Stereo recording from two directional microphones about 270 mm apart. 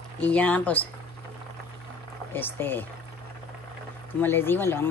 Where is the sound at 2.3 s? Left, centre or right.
Centre.